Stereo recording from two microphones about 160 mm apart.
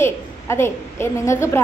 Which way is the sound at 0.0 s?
15° left (ahead or behind).